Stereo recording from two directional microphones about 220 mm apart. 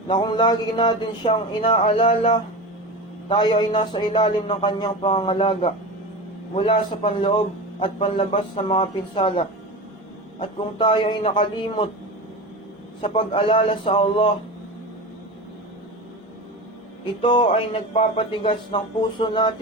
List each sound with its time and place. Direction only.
0.1 s a man's voice: 20° left (ahead or behind)
10.8 s a man's voice: 20° left (ahead or behind)
13.0 s a man's voice: 25° left (ahead or behind)
17.2 s a man's voice: 20° left (ahead or behind)